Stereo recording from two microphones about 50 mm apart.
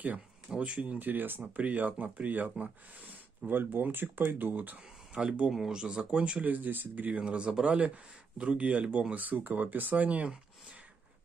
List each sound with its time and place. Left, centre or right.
0.6 s speech: right
3.4 s speech: right
5.1 s speech: centre
6.4 s speech: right
7.2 s speech: right
9.1 s speech: right